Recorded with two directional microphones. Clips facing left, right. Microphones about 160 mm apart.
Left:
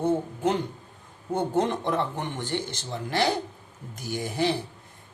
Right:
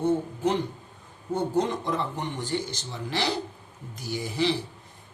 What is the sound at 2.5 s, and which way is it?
Speech, 55° left (ahead or behind).